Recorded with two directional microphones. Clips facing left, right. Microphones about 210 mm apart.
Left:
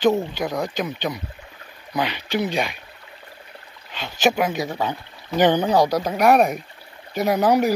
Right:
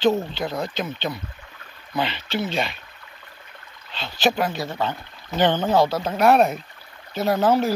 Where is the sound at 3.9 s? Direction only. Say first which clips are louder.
Left 2 dB; 15° left (ahead or behind).